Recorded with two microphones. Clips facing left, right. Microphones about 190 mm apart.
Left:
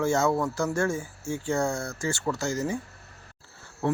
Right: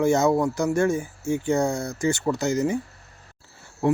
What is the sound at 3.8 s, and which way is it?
Speech, 15° right (ahead or behind).